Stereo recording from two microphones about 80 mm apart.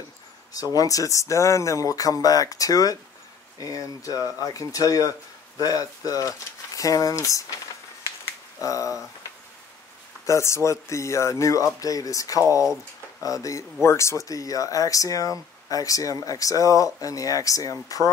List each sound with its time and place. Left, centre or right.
0.5 s speech: left
8.5 s speech: left
10.2 s speech: left